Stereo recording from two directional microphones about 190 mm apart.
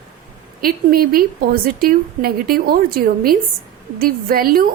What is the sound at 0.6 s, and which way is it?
A woman's voice, 50° right (ahead or behind).